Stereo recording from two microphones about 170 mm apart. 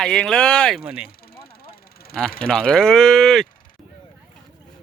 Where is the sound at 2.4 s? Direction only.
5° left (ahead or behind).